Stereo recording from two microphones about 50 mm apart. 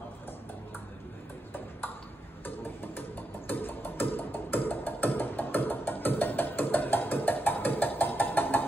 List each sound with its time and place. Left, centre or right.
2.4 s music: left